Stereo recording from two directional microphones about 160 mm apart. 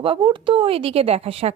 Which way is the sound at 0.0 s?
30° right (ahead or behind).